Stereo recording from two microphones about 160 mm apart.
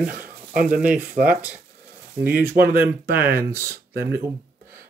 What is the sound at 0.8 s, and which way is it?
Speech, 10° right (ahead or behind).